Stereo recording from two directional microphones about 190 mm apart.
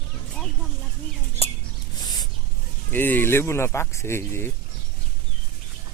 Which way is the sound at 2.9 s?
10° left (ahead or behind).